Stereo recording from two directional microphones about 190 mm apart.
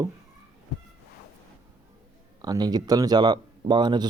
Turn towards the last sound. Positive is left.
turn(degrees=-25)  # may be behind; listen again after turning